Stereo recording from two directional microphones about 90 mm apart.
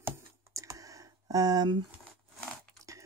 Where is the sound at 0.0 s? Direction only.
35° right (ahead or behind); by 1.8 s 50° right (ahead or behind).